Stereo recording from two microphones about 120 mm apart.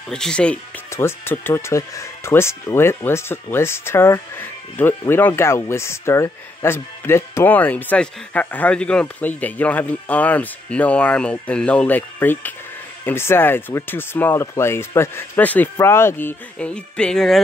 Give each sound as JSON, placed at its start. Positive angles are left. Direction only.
{"t": 0.1, "sound": "speech", "side_deg": 5}
{"t": 0.9, "sound": "speech", "side_deg": 20}